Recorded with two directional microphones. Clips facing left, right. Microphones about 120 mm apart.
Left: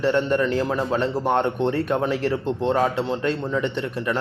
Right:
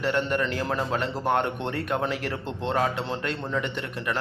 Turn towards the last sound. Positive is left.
turn(degrees=25)  # may be behind; listen again after turning